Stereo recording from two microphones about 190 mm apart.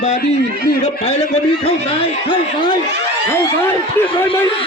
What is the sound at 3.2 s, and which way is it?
Speech, 10° left (ahead or behind).